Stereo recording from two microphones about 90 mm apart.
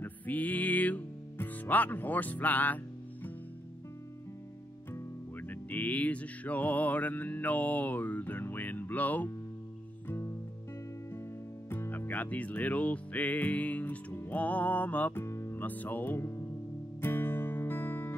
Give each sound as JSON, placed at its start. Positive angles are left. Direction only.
{"t": 0.0, "sound": "music", "side_deg": 20}
{"t": 5.5, "sound": "music", "side_deg": 20}
{"t": 11.7, "sound": "speech", "side_deg": 30}
{"t": 15.2, "sound": "music", "side_deg": 30}
{"t": 15.6, "sound": "speech", "side_deg": 20}
{"t": 17.0, "sound": "music", "side_deg": 25}